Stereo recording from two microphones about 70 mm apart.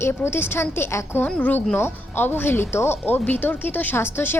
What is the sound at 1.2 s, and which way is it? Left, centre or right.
Speech, left.